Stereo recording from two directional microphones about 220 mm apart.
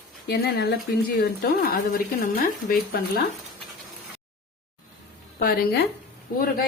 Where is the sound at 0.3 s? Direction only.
50° left (ahead or behind).